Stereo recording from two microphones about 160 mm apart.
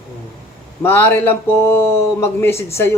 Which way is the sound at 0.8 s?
15° left (ahead or behind).